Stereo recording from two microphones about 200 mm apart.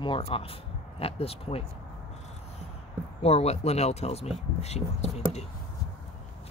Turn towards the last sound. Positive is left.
turn(degrees=35)  # may be behind; listen again after turning